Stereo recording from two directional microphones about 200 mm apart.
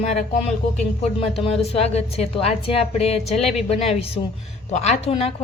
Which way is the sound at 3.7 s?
30° left (ahead or behind).